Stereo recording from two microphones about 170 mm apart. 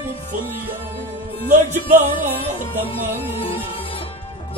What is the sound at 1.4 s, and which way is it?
Music, 45° right (ahead or behind).